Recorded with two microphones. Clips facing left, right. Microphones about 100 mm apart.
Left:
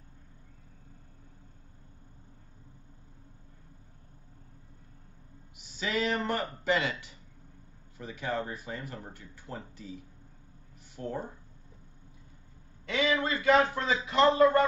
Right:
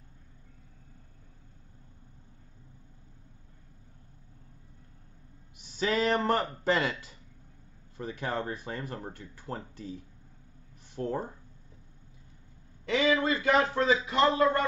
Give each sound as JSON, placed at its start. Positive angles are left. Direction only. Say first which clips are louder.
{"t": 5.8, "sound": "speech", "louder": "right 3 dB", "side_deg": -35}
{"t": 8.0, "sound": "speech", "louder": "right 1 dB", "side_deg": -40}
{"t": 11.0, "sound": "speech", "louder": "right 4 dB", "side_deg": -40}
{"t": 13.0, "sound": "speech", "louder": "right 2 dB", "side_deg": -30}
{"t": 13.5, "sound": "speech", "louder": "left 1 dB", "side_deg": 30}